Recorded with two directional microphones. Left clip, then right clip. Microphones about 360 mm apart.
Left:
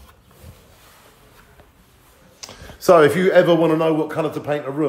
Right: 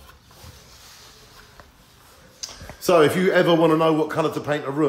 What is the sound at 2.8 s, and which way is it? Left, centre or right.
A man's voice, centre.